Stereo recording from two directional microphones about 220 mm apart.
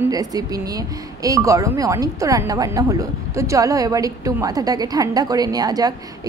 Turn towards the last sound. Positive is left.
turn(degrees=-15)  # may be behind; listen again after turning